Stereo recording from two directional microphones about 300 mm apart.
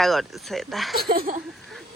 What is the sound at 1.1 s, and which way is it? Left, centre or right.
Speech, right.